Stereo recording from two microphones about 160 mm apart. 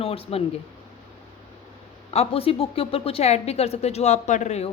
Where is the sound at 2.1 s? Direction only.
40° left (ahead or behind).